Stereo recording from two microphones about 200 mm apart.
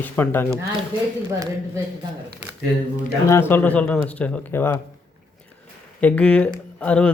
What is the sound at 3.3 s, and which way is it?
Speech, 10° left (ahead or behind).